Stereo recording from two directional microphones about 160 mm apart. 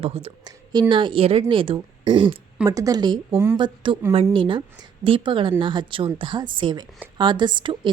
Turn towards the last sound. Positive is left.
turn(degrees=-30)  # may be behind; listen again after turning